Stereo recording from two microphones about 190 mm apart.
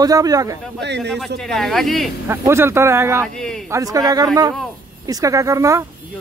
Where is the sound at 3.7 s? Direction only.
15° right (ahead or behind).